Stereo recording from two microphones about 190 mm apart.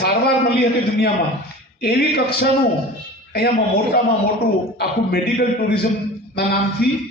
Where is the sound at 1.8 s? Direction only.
55° left (ahead or behind).